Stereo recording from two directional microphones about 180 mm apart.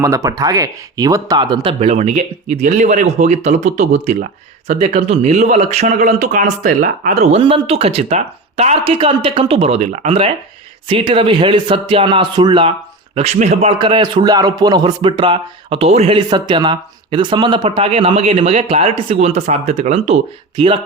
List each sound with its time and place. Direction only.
0.0 s speech: 15° right (ahead or behind)
13.1 s speech: 35° right (ahead or behind)